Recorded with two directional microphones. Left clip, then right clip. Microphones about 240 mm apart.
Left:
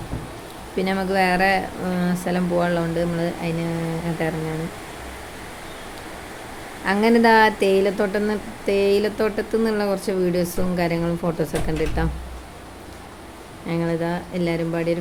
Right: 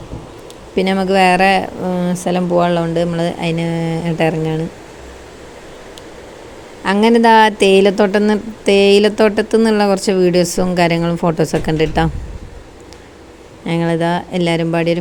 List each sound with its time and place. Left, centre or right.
0.8 s a woman's voice: right
6.8 s a woman's voice: right
13.7 s a woman's voice: right